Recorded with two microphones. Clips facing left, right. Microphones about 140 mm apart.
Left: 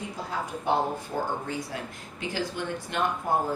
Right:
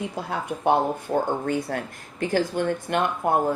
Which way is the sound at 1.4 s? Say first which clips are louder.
Right 7 dB; 60° right (ahead or behind).